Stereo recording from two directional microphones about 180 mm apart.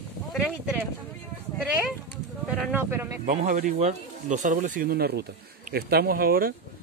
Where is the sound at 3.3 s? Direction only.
50° right (ahead or behind).